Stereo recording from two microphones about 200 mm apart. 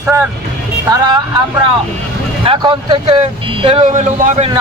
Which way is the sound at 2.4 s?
25° right (ahead or behind).